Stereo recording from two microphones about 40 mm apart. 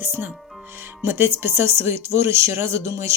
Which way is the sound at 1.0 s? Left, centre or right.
Right.